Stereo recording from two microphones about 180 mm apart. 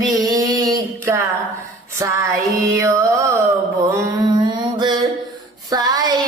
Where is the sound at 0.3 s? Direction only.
20° right (ahead or behind).